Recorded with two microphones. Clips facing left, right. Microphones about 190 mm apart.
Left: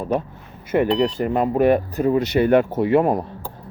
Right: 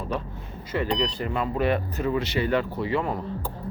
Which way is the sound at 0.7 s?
50° left (ahead or behind).